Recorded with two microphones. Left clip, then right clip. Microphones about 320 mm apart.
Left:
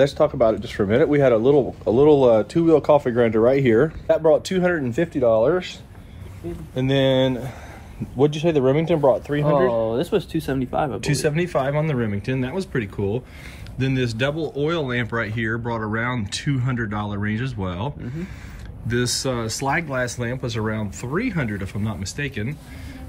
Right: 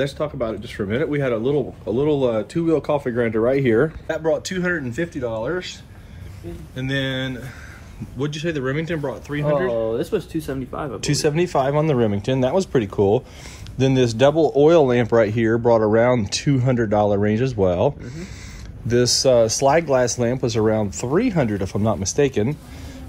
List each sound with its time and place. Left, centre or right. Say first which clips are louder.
0.0 s speech: left 7 dB; centre
9.8 s speech: left 1 dB; centre
11.0 s speech: right 2 dB; centre